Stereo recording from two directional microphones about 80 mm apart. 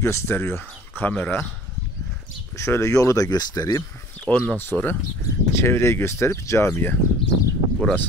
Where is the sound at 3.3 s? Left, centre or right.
Left.